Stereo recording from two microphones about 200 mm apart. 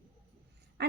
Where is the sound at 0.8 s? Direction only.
55° right (ahead or behind).